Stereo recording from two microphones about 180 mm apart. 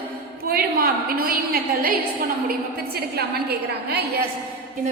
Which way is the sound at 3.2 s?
60° right (ahead or behind).